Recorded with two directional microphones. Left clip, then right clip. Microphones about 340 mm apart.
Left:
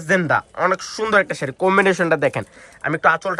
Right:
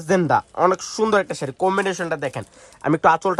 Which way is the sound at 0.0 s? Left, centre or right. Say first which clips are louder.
Left 1 dB; centre.